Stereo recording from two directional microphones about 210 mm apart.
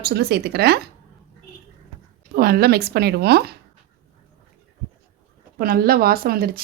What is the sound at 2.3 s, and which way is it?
A woman's voice, 45° right (ahead or behind).